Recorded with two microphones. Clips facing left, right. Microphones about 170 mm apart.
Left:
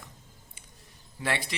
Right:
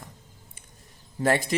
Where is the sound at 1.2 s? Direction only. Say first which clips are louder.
Right 8 dB; 45° right (ahead or behind).